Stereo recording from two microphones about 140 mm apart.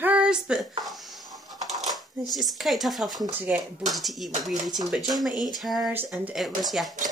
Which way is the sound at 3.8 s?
Centre (ahead or behind).